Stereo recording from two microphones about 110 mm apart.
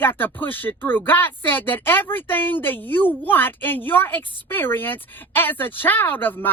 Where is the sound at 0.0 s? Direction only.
20° left (ahead or behind).